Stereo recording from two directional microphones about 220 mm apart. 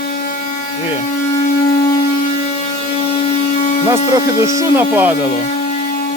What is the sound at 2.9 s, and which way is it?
Hum, 25° left (ahead or behind).